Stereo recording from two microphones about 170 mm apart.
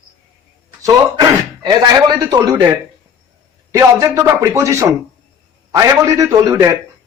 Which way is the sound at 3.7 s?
20° right (ahead or behind).